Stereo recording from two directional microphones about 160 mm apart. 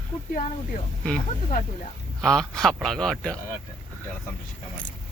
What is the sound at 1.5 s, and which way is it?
Speech, 60° left (ahead or behind).